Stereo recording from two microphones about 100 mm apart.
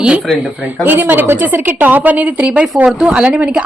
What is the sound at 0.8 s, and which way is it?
A woman's voice, 20° right (ahead or behind).